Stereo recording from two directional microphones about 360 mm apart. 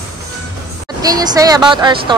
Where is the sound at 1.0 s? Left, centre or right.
Centre.